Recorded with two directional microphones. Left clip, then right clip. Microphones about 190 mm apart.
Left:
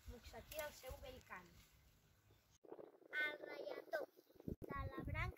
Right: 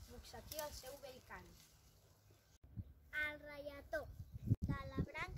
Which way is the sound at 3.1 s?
5° right (ahead or behind).